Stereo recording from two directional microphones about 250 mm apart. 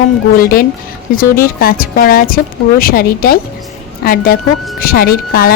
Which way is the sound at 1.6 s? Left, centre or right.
Left.